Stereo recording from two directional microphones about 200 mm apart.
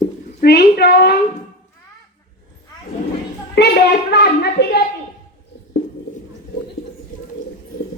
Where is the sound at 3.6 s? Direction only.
55° left (ahead or behind).